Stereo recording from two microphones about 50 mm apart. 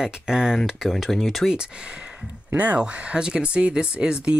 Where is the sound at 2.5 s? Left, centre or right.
Right.